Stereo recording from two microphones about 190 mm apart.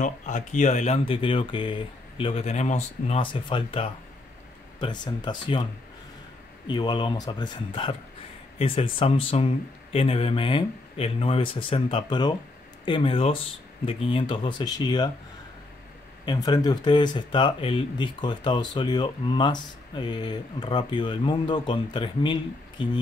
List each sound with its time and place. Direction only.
0.0 s speech: 40° left (ahead or behind); by 5.7 s 25° left (ahead or behind)
6.7 s speech: 25° left (ahead or behind)
16.3 s speech: 20° left (ahead or behind)